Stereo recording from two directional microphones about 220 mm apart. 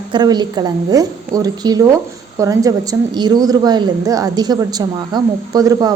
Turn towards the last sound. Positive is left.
turn(degrees=-15)  # may be behind; listen again after turning